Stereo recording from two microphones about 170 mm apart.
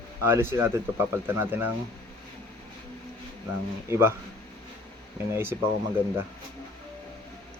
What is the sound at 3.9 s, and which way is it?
Speech, 15° right (ahead or behind).